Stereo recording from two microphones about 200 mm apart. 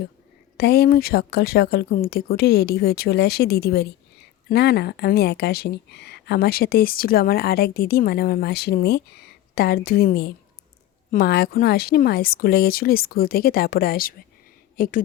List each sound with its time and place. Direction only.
0.5 s speech: 50° left (ahead or behind)